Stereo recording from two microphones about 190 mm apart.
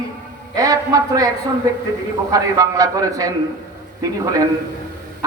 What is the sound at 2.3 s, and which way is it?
A man's voice, 20° right (ahead or behind).